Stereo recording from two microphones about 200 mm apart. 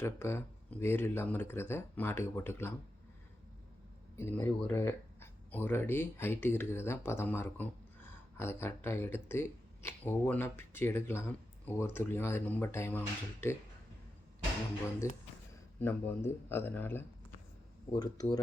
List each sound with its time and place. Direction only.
0.0 s speech: 10° left (ahead or behind)
4.2 s speech: 10° left (ahead or behind)
15.0 s speech: 15° left (ahead or behind)